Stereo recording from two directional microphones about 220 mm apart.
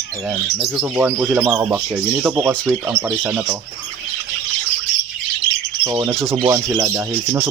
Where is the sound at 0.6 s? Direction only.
5° right (ahead or behind).